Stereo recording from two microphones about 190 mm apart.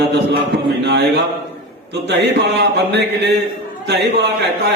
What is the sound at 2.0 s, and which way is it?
Speech, 60° right (ahead or behind).